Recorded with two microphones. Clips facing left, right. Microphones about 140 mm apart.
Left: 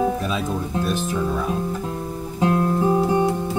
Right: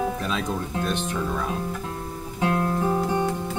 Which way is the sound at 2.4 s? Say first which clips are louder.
Left 4 dB; 25° left (ahead or behind).